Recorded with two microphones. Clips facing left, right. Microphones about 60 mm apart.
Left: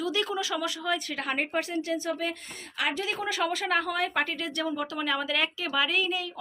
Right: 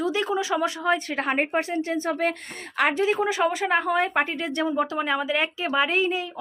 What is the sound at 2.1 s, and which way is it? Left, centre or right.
Speech, right.